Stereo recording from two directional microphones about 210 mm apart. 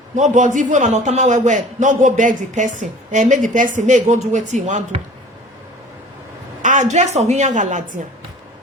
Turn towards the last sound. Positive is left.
turn(degrees=-35)  # may be behind; listen again after turning